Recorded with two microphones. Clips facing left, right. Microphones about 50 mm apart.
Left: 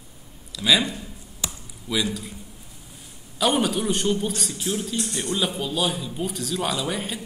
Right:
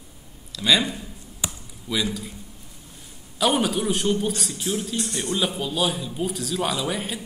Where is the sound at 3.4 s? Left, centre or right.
Centre.